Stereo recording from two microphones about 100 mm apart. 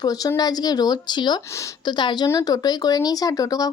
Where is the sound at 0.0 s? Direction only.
40° left (ahead or behind).